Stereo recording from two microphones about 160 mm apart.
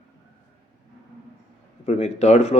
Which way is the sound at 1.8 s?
45° left (ahead or behind).